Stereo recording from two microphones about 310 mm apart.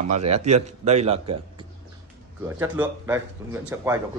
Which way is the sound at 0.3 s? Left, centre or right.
Right.